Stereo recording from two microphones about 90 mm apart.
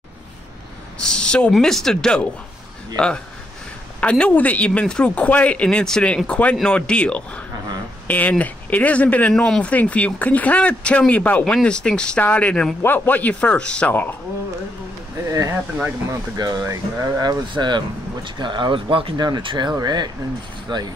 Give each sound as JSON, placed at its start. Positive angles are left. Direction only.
{"t": 1.0, "sound": "a woman's voice", "side_deg": 10}
{"t": 4.0, "sound": "speech", "side_deg": 15}
{"t": 15.2, "sound": "speech", "side_deg": -35}
{"t": 16.3, "sound": "speech", "side_deg": -50}
{"t": 16.6, "sound": "speech", "side_deg": -30}
{"t": 17.2, "sound": "speech", "side_deg": -50}
{"t": 19.1, "sound": "speech", "side_deg": -55}